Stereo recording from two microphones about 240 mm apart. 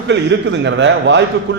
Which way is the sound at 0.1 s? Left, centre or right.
Right.